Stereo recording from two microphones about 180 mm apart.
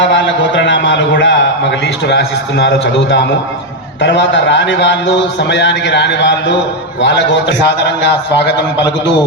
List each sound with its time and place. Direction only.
0.0 s a sound: 90° left
1.8 s a man's voice: 70° left (ahead or behind)
4.0 s a man's voice: 75° left (ahead or behind)